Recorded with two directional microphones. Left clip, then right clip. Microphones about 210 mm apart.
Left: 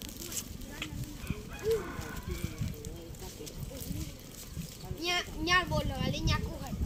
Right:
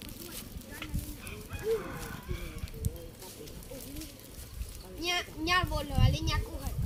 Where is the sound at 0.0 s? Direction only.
35° left (ahead or behind).